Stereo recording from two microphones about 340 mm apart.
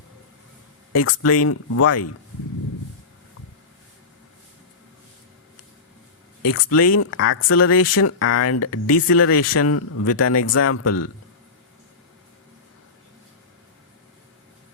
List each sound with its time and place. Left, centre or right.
0.9 s speech: left
6.4 s speech: left